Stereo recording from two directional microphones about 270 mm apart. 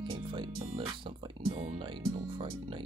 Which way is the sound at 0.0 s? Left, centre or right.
Centre.